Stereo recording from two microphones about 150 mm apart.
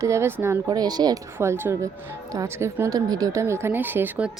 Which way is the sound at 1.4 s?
15° right (ahead or behind).